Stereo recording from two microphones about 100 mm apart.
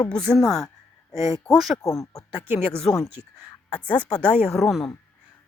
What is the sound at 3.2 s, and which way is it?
Speech, 55° left (ahead or behind).